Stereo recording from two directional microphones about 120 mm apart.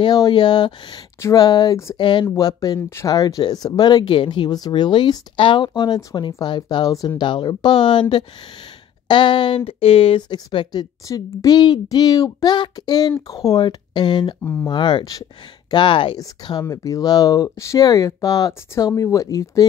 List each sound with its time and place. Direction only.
0.0 s speech: 35° left (ahead or behind)
2.3 s speech: 30° left (ahead or behind)
5.7 s speech: 30° left (ahead or behind)
9.7 s speech: 50° left (ahead or behind)
10.3 s speech: 40° left (ahead or behind)
14.4 s speech: 20° left (ahead or behind)
14.7 s speech: 40° left (ahead or behind)
16.2 s speech: 35° left (ahead or behind)